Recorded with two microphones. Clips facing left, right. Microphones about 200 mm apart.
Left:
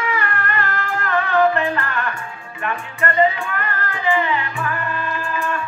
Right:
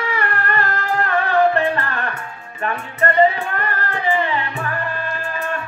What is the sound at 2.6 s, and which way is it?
Music, 40° right (ahead or behind).